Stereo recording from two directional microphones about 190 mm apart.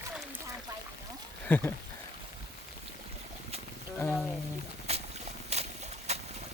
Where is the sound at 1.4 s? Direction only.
10° left (ahead or behind).